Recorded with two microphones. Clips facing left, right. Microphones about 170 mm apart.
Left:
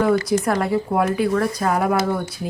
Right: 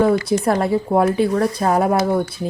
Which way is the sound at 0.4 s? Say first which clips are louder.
Right 3 dB; 30° right (ahead or behind).